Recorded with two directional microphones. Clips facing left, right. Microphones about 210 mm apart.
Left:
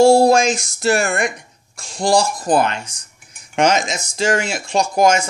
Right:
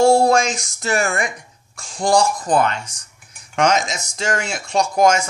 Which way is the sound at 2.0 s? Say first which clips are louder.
Left 1 dB; 30° left (ahead or behind).